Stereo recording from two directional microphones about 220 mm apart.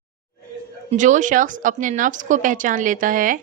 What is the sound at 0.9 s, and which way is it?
A woman's voice, 35° right (ahead or behind).